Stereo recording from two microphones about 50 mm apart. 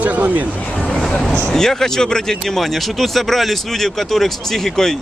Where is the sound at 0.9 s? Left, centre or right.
Centre.